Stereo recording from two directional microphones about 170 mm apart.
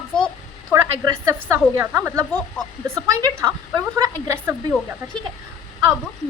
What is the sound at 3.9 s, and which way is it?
Speech, 20° right (ahead or behind).